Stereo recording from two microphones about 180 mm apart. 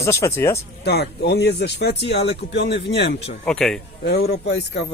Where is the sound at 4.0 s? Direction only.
65° left (ahead or behind).